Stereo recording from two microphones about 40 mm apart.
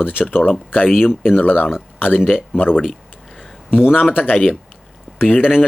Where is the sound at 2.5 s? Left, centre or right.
Left.